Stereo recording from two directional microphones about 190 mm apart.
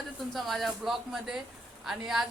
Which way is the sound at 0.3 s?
Centre (ahead or behind).